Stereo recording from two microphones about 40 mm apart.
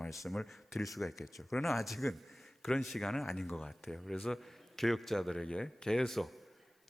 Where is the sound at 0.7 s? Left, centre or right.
Centre.